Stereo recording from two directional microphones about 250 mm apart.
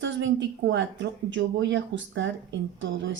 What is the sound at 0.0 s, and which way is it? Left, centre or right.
A woman's voice, right.